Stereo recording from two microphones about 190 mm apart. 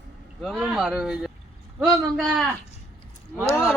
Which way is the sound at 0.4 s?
Centre (ahead or behind).